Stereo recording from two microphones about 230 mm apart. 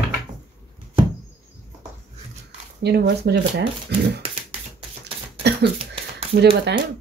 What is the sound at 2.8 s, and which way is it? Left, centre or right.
Speech, right.